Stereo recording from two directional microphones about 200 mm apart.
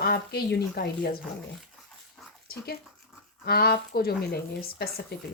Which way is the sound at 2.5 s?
50° left (ahead or behind).